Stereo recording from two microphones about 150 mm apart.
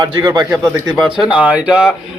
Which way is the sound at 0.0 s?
30° right (ahead or behind).